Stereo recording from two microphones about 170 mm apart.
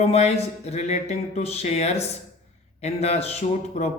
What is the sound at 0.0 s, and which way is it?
Speech, 40° left (ahead or behind).